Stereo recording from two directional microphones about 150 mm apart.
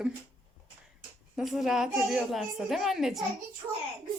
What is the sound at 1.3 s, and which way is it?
A woman's voice, centre (ahead or behind).